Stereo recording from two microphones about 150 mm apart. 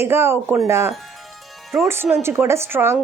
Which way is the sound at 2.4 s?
15° right (ahead or behind).